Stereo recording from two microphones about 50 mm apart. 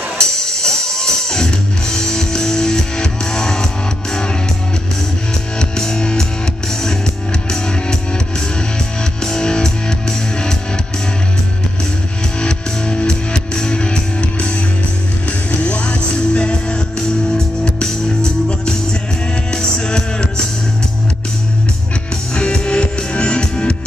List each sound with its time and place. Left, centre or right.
0.2 s music: centre
5.6 s music: centre
9.2 s music: centre
12.4 s music: centre
15.6 s music: left
17.8 s music: centre
22.3 s music: centre